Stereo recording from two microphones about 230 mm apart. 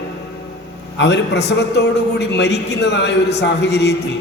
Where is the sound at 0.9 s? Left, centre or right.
Left.